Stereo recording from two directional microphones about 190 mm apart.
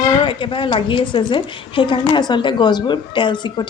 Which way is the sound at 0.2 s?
25° left (ahead or behind).